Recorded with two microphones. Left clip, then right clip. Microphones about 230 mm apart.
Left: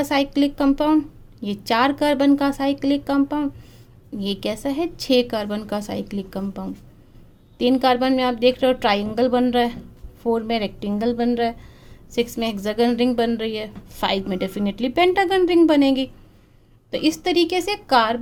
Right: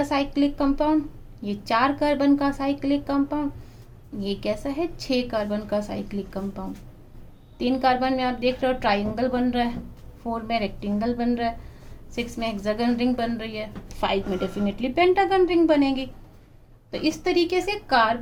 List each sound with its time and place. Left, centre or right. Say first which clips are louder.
0.0 s a woman's voice: left 3 dB; left